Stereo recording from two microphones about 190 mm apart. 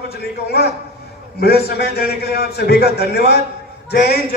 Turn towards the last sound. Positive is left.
turn(degrees=60)  # may be behind; listen again after turning